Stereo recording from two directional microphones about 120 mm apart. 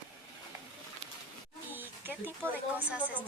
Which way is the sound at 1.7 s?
15° right (ahead or behind).